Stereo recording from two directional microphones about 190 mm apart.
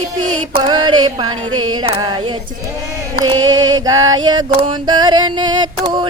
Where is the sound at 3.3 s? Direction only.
20° right (ahead or behind).